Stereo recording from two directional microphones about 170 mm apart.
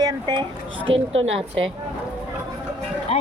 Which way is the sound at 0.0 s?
25° right (ahead or behind).